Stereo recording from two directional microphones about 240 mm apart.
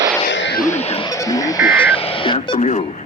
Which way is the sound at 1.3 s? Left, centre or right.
Centre.